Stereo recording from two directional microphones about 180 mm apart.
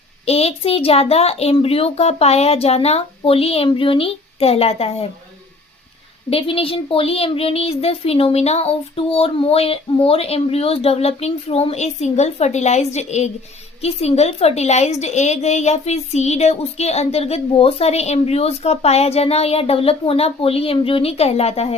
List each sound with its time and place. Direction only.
0.3 s a woman's voice: 35° left (ahead or behind)
6.3 s a woman's voice: 30° left (ahead or behind)